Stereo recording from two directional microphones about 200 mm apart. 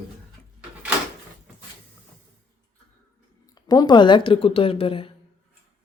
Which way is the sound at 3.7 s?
20° left (ahead or behind).